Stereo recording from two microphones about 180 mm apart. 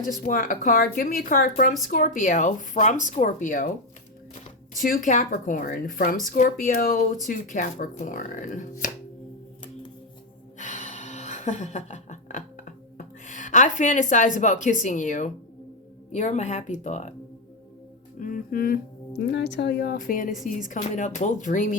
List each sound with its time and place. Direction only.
0.0 s speech: 50° left (ahead or behind)
10.6 s a sound: 40° left (ahead or behind)
16.1 s speech: 40° left (ahead or behind)
18.2 s speech: 50° left (ahead or behind)
19.1 s a woman's voice: 70° left (ahead or behind); by 21.8 s 45° left (ahead or behind)